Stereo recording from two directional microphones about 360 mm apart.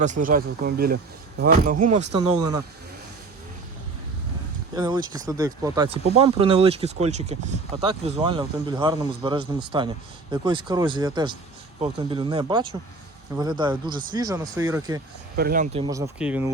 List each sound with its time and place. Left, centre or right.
0.0 s speech: right
4.7 s speech: centre
15.4 s speech: right; by 16.5 s centre